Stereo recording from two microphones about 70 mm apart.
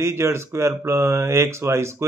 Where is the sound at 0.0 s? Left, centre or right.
Right.